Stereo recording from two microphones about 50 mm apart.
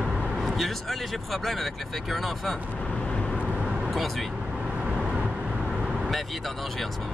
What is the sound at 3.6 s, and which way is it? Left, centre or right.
Vehicle, centre.